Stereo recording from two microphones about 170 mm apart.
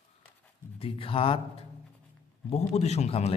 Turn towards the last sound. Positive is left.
turn(degrees=40)  # may be behind; listen again after turning